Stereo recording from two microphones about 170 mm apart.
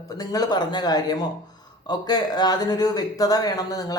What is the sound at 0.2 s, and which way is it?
Speech, 20° left (ahead or behind).